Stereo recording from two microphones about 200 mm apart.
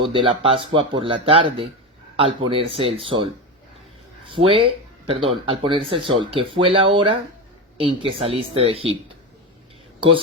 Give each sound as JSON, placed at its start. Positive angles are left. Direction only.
{"t": 0.0, "sound": "speech", "side_deg": -25}
{"t": 4.3, "sound": "speech", "side_deg": -25}